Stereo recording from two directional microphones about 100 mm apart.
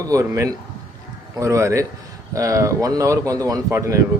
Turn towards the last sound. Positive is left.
turn(degrees=-30)  # may be behind; listen again after turning